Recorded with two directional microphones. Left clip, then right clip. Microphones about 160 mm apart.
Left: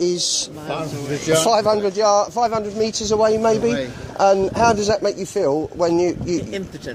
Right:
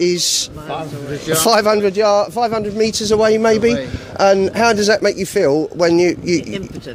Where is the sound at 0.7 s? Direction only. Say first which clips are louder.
Right 1 dB; 5° right (ahead or behind).